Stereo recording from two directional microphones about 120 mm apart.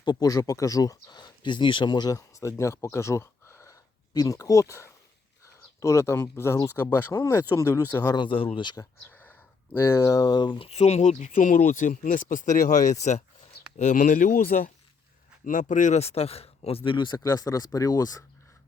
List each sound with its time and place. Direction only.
0.0 s speech: 35° left (ahead or behind); by 8.0 s 15° left (ahead or behind)
8.0 s speech: 40° left (ahead or behind)
9.0 s a sound: 15° left (ahead or behind)
9.7 s speech: 20° left (ahead or behind); by 13.2 s 75° left (ahead or behind)
13.7 s speech: 85° left; by 18.2 s 30° left (ahead or behind)